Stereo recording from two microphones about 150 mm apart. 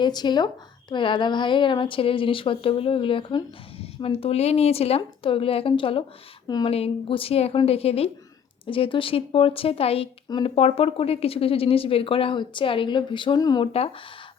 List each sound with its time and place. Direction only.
0.0 s a woman's voice: 30° left (ahead or behind)